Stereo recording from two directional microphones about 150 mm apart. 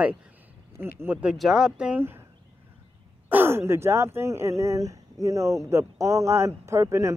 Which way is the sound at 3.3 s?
15° right (ahead or behind).